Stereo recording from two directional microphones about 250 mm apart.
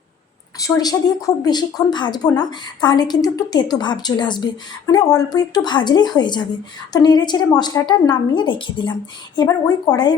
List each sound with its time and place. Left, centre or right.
0.6 s speech: centre